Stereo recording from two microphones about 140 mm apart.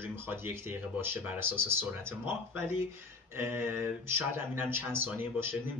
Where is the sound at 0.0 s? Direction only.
15° right (ahead or behind).